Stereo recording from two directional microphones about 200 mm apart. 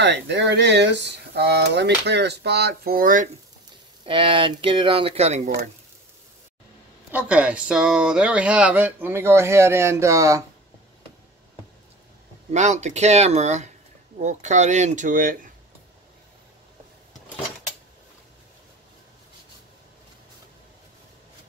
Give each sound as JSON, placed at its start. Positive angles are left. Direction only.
{"t": 0.0, "sound": "speech", "side_deg": -60}
{"t": 4.0, "sound": "speech", "side_deg": -25}
{"t": 7.1, "sound": "speech", "side_deg": -5}
{"t": 12.5, "sound": "speech", "side_deg": -35}